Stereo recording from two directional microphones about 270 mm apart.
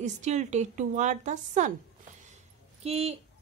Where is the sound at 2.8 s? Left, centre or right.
Right.